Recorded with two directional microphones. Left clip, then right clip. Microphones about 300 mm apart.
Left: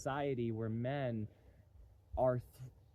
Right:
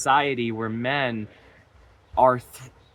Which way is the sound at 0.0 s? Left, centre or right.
Centre.